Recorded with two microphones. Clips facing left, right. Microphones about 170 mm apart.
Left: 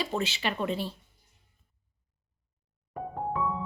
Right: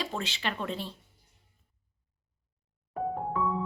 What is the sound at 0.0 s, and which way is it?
Speech, 5° left (ahead or behind).